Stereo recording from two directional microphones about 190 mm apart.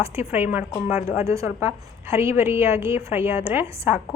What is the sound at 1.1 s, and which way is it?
A woman's voice, 15° right (ahead or behind).